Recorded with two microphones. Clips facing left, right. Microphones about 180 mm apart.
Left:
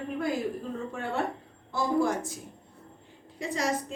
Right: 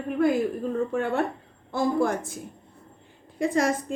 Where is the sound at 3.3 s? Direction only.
50° right (ahead or behind).